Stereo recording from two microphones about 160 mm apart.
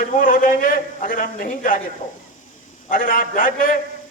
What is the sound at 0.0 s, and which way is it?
A man's voice, 55° left (ahead or behind).